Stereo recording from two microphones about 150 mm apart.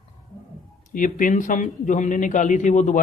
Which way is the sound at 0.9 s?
60° left (ahead or behind).